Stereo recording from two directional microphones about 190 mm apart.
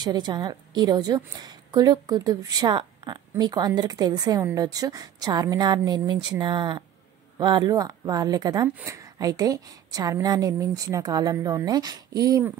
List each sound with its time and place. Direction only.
0.0 s a woman's voice: 20° right (ahead or behind)